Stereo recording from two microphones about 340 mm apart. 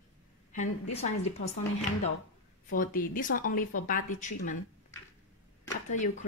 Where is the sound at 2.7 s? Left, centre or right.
Left.